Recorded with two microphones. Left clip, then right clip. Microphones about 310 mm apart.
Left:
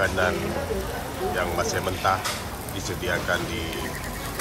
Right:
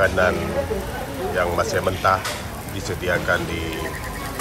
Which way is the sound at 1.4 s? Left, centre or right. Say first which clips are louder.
Right 7 dB; centre.